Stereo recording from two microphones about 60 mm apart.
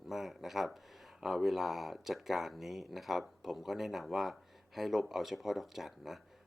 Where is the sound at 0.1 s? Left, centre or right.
Centre.